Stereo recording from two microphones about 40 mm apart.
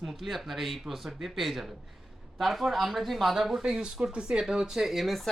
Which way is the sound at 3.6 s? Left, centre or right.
Centre.